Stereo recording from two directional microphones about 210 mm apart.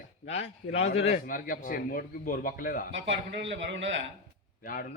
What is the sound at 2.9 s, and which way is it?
Speech, 60° right (ahead or behind).